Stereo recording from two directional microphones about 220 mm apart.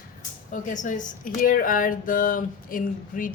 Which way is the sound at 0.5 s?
35° left (ahead or behind).